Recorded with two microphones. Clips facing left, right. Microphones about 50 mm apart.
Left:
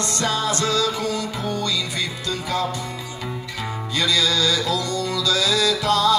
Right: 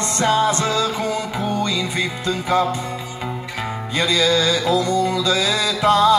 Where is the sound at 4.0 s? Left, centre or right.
Right.